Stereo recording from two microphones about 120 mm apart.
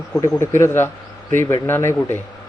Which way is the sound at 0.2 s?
20° left (ahead or behind).